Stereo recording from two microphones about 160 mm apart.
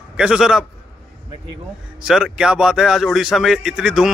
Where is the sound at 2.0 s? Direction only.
5° right (ahead or behind).